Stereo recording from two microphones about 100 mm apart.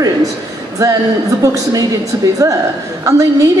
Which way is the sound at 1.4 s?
35° right (ahead or behind).